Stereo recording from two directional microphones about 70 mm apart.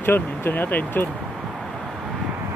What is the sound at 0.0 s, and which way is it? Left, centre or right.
Speech, left.